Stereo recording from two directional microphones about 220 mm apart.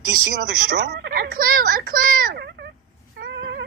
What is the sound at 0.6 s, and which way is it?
Speech, 45° right (ahead or behind).